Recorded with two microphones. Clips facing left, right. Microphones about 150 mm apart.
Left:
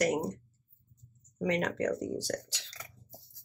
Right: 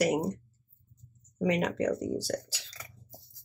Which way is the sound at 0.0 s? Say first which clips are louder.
Right 2 dB; 10° right (ahead or behind).